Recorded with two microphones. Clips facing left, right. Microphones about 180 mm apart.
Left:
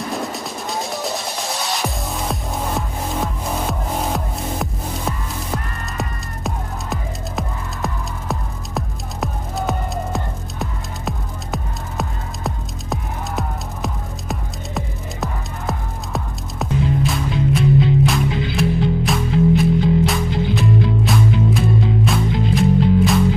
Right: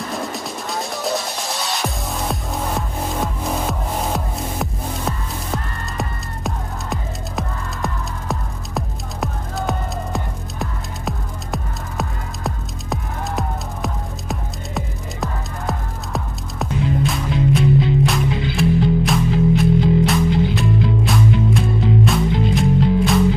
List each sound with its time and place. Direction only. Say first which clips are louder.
0.1 s music: left 1 dB; centre (ahead or behind)